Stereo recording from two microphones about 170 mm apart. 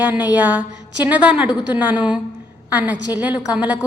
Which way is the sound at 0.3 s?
10° right (ahead or behind).